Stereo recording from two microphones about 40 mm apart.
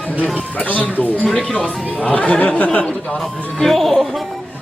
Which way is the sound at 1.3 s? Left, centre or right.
Centre.